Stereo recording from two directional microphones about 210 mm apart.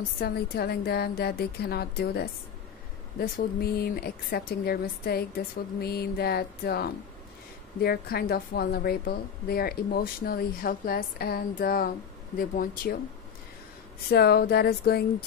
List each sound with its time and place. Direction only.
0.2 s a woman's voice: 50° left (ahead or behind)
14.1 s a woman's voice: 50° left (ahead or behind)